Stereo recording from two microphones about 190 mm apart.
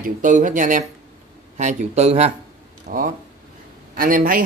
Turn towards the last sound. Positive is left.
turn(degrees=-45)  # may be behind; listen again after turning